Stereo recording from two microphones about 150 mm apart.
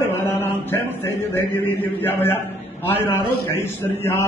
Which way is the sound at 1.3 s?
15° left (ahead or behind).